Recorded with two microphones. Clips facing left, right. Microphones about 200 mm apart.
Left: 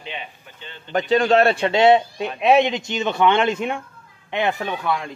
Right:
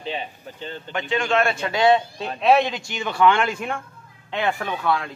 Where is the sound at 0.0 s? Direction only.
35° right (ahead or behind).